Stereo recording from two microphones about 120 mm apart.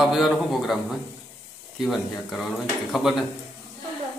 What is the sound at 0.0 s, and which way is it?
A man's voice, centre (ahead or behind).